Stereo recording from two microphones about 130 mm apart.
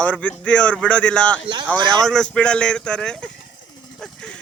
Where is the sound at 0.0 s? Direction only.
10° left (ahead or behind).